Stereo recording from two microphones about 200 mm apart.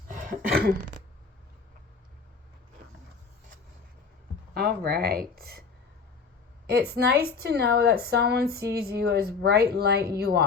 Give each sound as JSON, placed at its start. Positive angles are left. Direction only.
{"t": 0.1, "sound": "a sound", "side_deg": -40}
{"t": 4.5, "sound": "a woman's voice", "side_deg": -50}
{"t": 6.9, "sound": "a woman's voice", "side_deg": -50}